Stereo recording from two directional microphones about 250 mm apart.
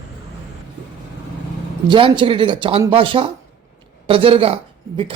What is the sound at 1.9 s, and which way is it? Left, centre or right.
A man's voice, centre.